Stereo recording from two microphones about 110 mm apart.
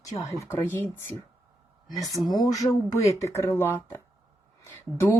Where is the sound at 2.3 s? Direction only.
35° left (ahead or behind).